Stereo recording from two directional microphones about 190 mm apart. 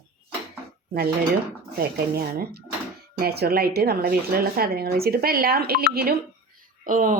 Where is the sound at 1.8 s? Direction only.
55° right (ahead or behind).